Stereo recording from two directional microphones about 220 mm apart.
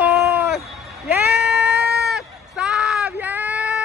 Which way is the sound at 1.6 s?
50° right (ahead or behind).